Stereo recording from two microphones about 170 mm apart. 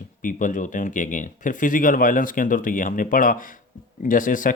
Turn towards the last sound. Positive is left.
turn(degrees=50)  # may be behind; listen again after turning